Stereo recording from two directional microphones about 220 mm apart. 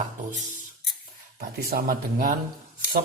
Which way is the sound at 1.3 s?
40° right (ahead or behind).